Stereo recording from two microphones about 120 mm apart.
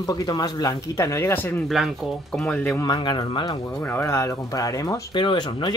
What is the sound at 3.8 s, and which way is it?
Speech, 15° left (ahead or behind).